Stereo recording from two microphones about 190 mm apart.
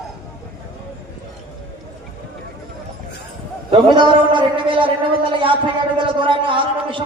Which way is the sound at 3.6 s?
25° right (ahead or behind).